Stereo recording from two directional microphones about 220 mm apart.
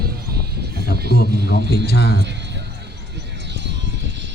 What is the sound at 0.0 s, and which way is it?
Sheep, 45° right (ahead or behind).